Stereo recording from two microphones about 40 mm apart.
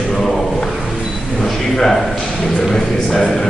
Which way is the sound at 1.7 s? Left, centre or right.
Centre.